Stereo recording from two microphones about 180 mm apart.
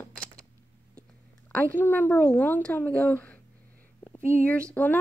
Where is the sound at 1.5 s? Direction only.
10° left (ahead or behind).